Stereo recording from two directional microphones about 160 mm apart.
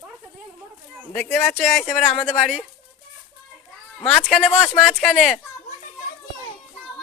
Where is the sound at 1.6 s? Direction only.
Centre (ahead or behind).